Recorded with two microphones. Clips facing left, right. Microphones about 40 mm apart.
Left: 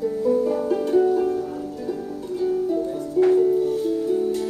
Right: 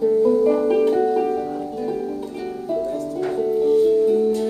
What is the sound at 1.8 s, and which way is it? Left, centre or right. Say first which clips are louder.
Harp: right 5 dB; right.